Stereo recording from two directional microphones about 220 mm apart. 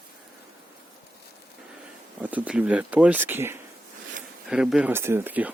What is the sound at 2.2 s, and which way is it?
Speech, 5° right (ahead or behind).